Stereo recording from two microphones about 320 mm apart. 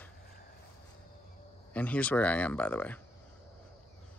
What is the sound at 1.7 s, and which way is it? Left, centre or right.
Speech, centre.